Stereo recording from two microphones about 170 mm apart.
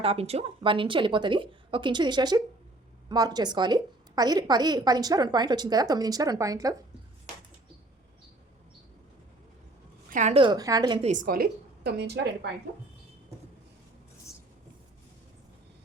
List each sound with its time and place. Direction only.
0.0 s a woman's voice: 35° right (ahead or behind); by 6.7 s 20° right (ahead or behind)
10.1 s a woman's voice: 45° right (ahead or behind)
10.3 s a woman's voice: 25° right (ahead or behind)
11.0 s a woman's voice: 50° right (ahead or behind); by 12.5 s 80° right